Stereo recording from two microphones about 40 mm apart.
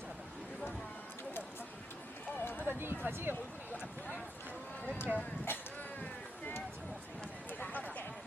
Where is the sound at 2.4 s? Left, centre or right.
Left.